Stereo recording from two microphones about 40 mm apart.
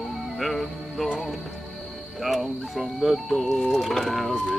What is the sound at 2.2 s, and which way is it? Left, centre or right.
Speech, centre.